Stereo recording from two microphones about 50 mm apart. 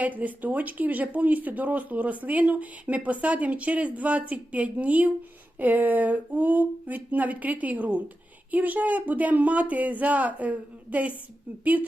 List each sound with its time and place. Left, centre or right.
0.0 s speech: right